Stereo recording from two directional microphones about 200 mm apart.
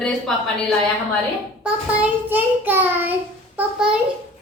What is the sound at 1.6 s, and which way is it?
Child singing, 10° right (ahead or behind).